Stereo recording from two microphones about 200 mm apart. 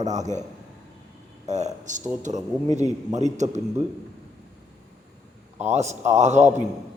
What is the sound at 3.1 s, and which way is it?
Speech, 35° right (ahead or behind).